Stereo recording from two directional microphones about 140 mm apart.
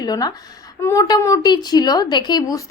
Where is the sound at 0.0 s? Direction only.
30° left (ahead or behind).